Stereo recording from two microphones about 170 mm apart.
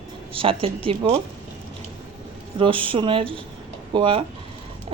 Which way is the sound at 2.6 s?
30° right (ahead or behind).